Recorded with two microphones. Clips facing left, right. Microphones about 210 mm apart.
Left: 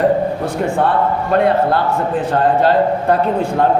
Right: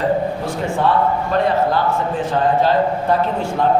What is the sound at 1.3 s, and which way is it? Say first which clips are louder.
Speech: left 5 dB; 60° left (ahead or behind).